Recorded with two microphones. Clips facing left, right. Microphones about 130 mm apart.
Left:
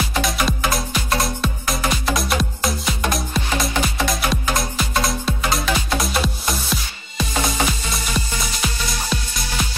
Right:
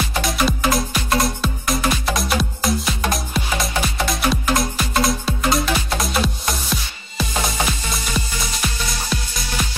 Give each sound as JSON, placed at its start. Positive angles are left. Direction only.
{"t": 0.1, "sound": "music", "side_deg": 0}